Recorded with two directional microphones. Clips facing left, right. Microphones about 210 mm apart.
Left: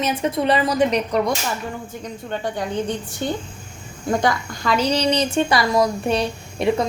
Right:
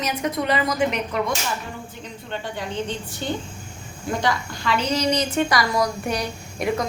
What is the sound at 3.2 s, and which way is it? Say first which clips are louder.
A woman's voice: left 2 dB; 50° left (ahead or behind).